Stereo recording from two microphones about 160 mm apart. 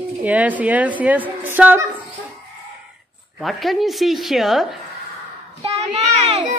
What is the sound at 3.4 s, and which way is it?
Speech, centre (ahead or behind).